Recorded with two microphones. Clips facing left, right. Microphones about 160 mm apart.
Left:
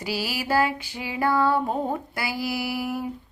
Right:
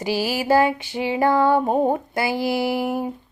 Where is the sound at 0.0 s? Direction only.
45° right (ahead or behind).